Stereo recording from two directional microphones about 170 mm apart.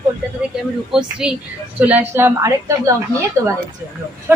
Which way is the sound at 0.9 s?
5° right (ahead or behind).